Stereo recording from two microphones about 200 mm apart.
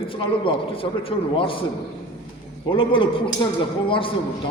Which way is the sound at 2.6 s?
25° left (ahead or behind).